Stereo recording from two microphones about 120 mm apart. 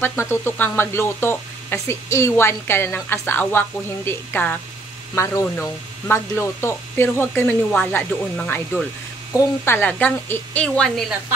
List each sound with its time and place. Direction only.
0.0 s speech: 20° left (ahead or behind)